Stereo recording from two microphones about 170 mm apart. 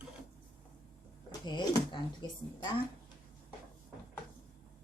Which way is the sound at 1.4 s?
25° left (ahead or behind).